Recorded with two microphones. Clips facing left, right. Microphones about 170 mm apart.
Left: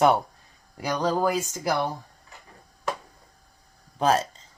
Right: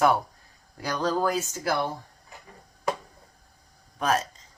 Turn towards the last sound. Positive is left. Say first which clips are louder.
# left 3 dB
turn(degrees=30)  # may be behind; listen again after turning